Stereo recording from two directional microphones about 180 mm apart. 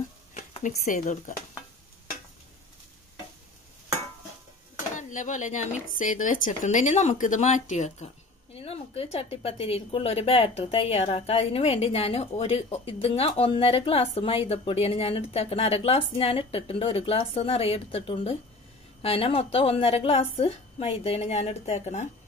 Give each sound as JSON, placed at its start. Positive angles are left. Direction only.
{"t": 0.7, "sound": "speech", "side_deg": 45}
{"t": 4.9, "sound": "a woman's voice", "side_deg": 45}